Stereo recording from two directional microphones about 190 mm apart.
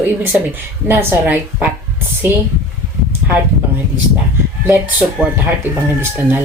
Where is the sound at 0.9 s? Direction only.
10° right (ahead or behind).